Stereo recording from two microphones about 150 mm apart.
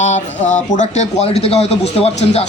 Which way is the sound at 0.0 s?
50° left (ahead or behind).